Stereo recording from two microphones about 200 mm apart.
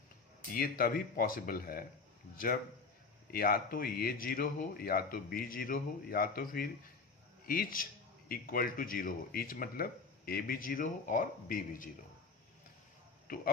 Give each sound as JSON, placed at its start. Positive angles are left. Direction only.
{"t": 0.5, "sound": "speech", "side_deg": 50}
{"t": 3.3, "sound": "a man's voice", "side_deg": 45}
{"t": 13.2, "sound": "speech", "side_deg": 45}